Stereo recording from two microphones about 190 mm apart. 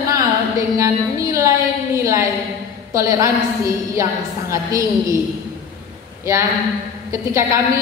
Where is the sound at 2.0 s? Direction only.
15° right (ahead or behind).